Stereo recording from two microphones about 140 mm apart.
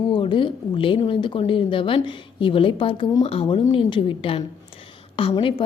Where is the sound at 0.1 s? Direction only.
35° left (ahead or behind).